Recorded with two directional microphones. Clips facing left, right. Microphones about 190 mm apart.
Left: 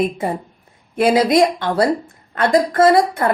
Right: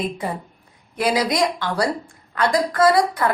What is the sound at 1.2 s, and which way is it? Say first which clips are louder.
Speech: left 6 dB; 25° left (ahead or behind).